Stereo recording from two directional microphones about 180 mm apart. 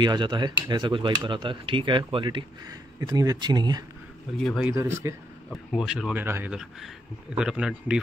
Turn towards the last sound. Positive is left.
turn(degrees=-5)  # may be behind; listen again after turning